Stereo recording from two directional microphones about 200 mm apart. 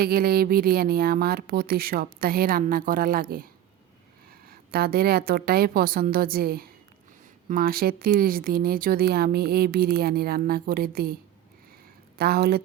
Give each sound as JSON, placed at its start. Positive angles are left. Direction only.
{"t": 0.0, "sound": "speech", "side_deg": -50}